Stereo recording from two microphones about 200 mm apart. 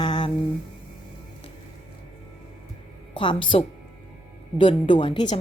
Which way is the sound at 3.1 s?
25° left (ahead or behind).